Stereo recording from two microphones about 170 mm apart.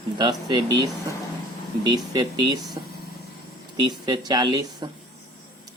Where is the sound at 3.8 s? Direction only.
25° right (ahead or behind).